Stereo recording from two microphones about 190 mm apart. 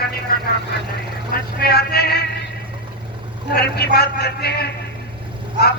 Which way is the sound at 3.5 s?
55° left (ahead or behind).